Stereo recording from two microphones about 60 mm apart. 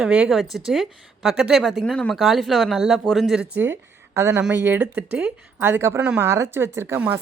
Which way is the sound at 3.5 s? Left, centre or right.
Right.